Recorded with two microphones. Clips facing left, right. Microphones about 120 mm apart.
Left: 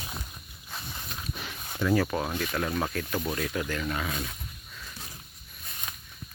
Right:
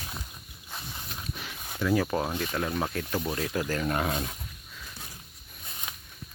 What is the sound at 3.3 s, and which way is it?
Speech, 30° right (ahead or behind).